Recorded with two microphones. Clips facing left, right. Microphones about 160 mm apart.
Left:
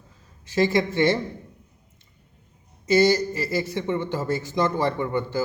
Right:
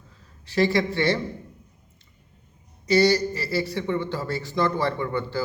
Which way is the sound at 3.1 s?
15° left (ahead or behind).